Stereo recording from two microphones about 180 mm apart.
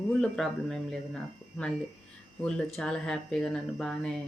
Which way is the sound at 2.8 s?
5° left (ahead or behind).